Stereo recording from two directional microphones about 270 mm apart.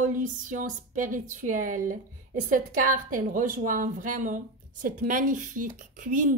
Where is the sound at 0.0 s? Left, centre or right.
Right.